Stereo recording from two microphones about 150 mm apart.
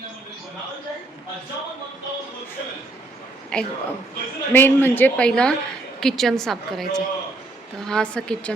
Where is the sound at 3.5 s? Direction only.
5° left (ahead or behind).